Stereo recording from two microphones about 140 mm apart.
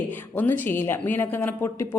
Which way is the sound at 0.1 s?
15° left (ahead or behind).